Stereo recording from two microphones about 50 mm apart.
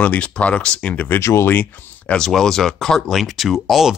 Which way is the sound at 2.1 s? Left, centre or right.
Centre.